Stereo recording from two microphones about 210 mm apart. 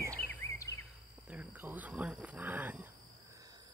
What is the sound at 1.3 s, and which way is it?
Speech, 5° right (ahead or behind).